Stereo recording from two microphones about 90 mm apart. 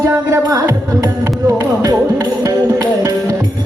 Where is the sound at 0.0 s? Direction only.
40° right (ahead or behind).